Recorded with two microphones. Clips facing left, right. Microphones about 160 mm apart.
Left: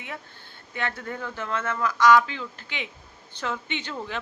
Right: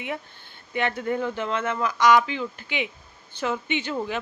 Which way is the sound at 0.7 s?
20° right (ahead or behind).